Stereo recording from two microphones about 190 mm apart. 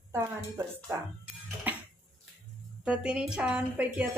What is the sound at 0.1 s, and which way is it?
Speech, 15° right (ahead or behind).